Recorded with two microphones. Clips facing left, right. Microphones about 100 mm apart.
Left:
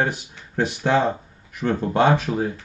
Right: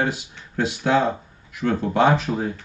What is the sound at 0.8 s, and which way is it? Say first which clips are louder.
Speech: even; 50° left (ahead or behind).